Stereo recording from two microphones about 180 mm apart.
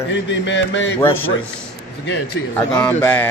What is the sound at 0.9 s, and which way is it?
Speech, 15° left (ahead or behind).